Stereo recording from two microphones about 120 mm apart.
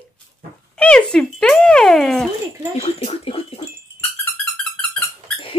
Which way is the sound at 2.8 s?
65° left (ahead or behind).